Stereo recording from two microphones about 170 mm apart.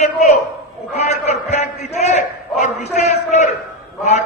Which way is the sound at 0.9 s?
40° left (ahead or behind).